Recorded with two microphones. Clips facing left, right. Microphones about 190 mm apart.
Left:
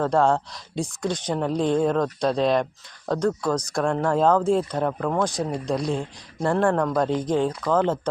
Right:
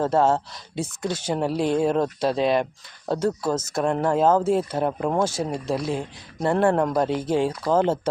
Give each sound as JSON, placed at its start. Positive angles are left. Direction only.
{"t": 0.1, "sound": "a woman's voice", "side_deg": -5}
{"t": 4.9, "sound": "speech", "side_deg": -15}
{"t": 5.2, "sound": "a woman's voice", "side_deg": -5}